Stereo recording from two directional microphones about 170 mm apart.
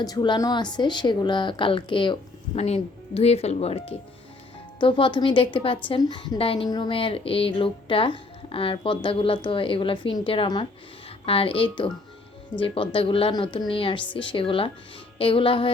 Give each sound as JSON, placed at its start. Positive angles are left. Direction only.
{"t": 0.0, "sound": "a woman's voice", "side_deg": 25}